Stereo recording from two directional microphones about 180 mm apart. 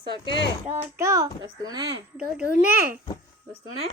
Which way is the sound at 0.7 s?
15° right (ahead or behind).